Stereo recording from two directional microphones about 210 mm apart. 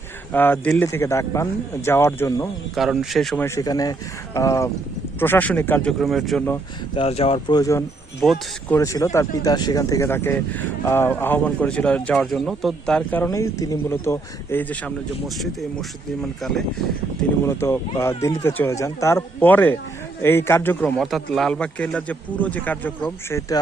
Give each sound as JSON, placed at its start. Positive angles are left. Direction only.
{"t": 0.3, "sound": "speech", "side_deg": 10}
{"t": 2.7, "sound": "speech", "side_deg": 0}
{"t": 3.4, "sound": "speech", "side_deg": 15}
{"t": 6.9, "sound": "speech", "side_deg": 25}
{"t": 8.2, "sound": "speech", "side_deg": 0}
{"t": 8.8, "sound": "speech", "side_deg": 15}
{"t": 17.4, "sound": "speech", "side_deg": 10}